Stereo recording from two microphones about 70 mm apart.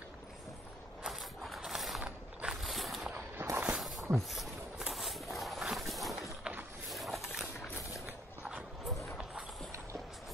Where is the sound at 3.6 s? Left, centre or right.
Centre.